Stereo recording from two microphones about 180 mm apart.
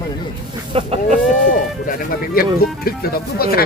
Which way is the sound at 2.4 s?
55° left (ahead or behind).